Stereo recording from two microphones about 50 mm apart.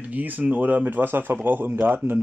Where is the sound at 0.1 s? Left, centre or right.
Right.